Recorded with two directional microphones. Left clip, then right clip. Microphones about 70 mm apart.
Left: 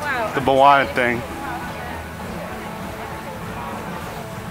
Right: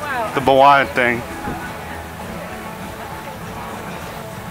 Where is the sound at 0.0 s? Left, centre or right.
Left.